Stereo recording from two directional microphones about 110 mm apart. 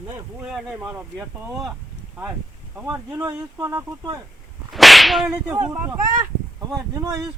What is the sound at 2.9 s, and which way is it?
Speech, 15° right (ahead or behind).